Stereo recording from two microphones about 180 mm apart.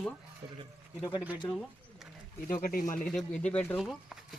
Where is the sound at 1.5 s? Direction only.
5° left (ahead or behind).